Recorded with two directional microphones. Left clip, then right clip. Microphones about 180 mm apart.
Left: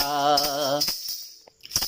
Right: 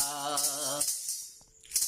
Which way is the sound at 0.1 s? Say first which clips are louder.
Left 12 dB; 40° left (ahead or behind).